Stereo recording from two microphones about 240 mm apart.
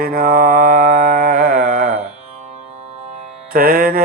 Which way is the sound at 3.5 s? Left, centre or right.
Right.